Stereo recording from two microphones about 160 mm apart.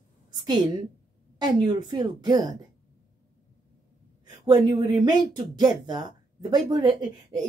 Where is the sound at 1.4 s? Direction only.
30° right (ahead or behind).